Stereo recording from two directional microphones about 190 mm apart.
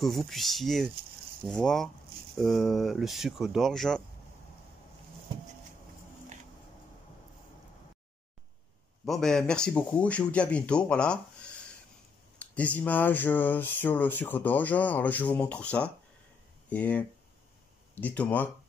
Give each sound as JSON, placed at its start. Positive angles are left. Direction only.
{"t": 0.0, "sound": "speech", "side_deg": 0}
{"t": 9.0, "sound": "speech", "side_deg": 0}